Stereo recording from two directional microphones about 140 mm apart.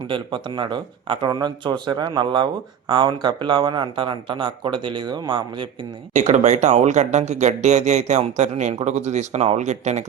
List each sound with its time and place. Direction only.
0.1 s a man's voice: 35° right (ahead or behind)
6.1 s speech: 55° right (ahead or behind)